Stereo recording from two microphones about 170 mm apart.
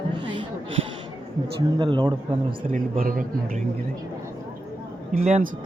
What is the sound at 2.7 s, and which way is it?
Speech, 55° right (ahead or behind).